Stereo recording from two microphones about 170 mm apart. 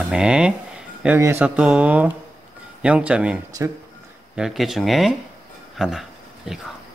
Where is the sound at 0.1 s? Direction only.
5° right (ahead or behind).